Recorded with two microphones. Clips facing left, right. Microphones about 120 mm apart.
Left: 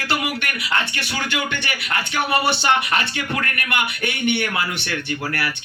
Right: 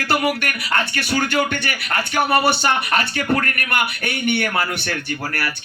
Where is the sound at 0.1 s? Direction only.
45° right (ahead or behind).